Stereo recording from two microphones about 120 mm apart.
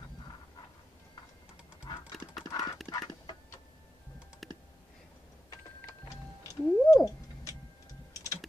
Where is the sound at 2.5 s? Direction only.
30° left (ahead or behind).